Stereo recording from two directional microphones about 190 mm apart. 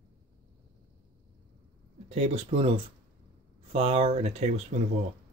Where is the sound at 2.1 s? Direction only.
35° right (ahead or behind).